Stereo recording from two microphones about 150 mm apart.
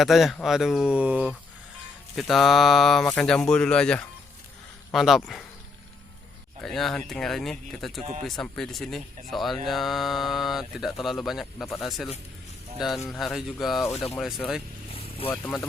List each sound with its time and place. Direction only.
0.0 s speech: centre (ahead or behind)
6.6 s speech: centre (ahead or behind)